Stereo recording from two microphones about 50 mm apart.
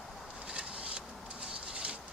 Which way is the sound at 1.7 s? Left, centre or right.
Right.